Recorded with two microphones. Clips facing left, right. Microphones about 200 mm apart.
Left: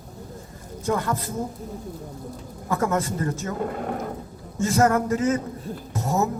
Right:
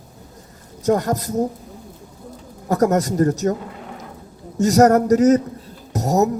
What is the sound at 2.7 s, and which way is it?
Speech, 40° right (ahead or behind).